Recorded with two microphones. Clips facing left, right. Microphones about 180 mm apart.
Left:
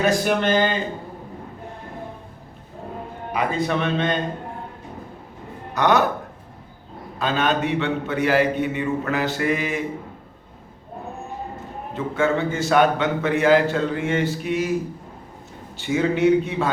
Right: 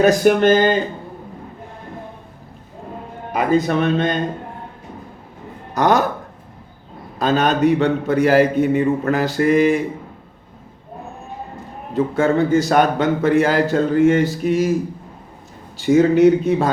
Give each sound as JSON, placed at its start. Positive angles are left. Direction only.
{"t": 0.0, "sound": "speech", "side_deg": -45}
{"t": 3.3, "sound": "speech", "side_deg": -45}
{"t": 5.7, "sound": "a man's voice", "side_deg": -35}
{"t": 7.2, "sound": "a man's voice", "side_deg": -40}
{"t": 11.9, "sound": "a man's voice", "side_deg": -40}
{"t": 15.8, "sound": "a man's voice", "side_deg": -40}